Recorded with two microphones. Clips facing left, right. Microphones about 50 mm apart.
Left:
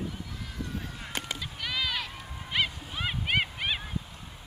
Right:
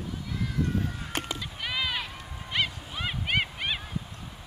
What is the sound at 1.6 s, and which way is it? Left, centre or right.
Run, centre.